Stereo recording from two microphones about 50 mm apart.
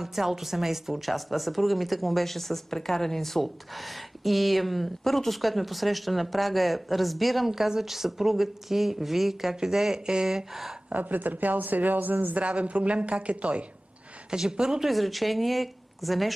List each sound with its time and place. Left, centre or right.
0.0 s speech: centre
10.9 s speech: right
14.3 s speech: centre
14.9 s speech: centre